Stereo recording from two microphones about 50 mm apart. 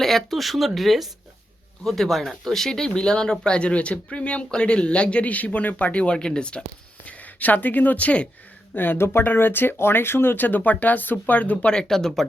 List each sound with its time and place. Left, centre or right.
0.0 s speech: centre
7.0 s speech: left
8.7 s speech: left
11.5 s speech: centre